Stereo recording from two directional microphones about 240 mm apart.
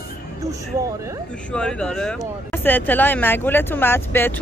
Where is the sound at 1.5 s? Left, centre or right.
Centre.